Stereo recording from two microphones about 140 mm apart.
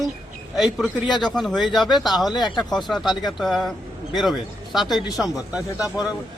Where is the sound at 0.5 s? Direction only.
Centre (ahead or behind).